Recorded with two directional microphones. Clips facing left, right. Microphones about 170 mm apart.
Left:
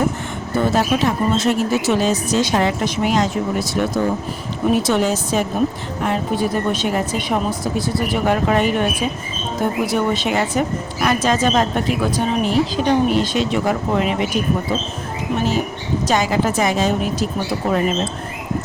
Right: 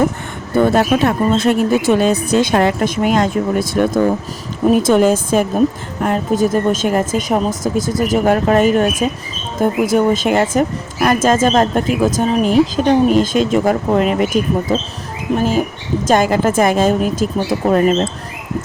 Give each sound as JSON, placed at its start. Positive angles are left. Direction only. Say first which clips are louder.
{"t": 0.5, "sound": "a woman's voice", "louder": "right 5 dB", "side_deg": -55}
{"t": 15.4, "sound": "a woman's voice", "louder": "right 4 dB", "side_deg": -45}